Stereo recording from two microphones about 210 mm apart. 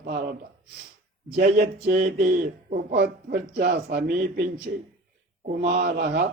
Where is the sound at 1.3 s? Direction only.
45° right (ahead or behind).